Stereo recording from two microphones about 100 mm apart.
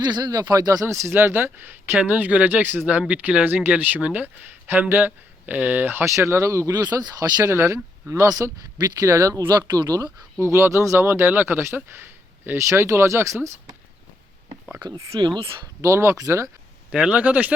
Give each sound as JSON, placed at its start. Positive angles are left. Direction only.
{"t": 0.0, "sound": "speech", "side_deg": -45}
{"t": 7.5, "sound": "speech", "side_deg": -30}
{"t": 10.4, "sound": "speech", "side_deg": -30}
{"t": 15.1, "sound": "speech", "side_deg": -50}
{"t": 15.6, "sound": "speech", "side_deg": -30}
{"t": 16.9, "sound": "speech", "side_deg": -10}